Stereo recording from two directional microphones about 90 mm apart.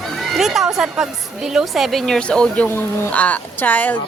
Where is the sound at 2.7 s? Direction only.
25° left (ahead or behind).